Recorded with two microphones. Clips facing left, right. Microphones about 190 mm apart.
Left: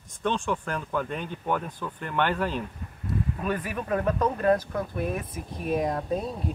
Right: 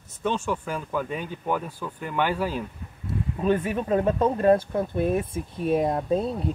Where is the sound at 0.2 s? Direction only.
10° right (ahead or behind).